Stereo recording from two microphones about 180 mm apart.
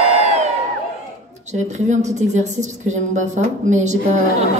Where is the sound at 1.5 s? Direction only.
40° right (ahead or behind).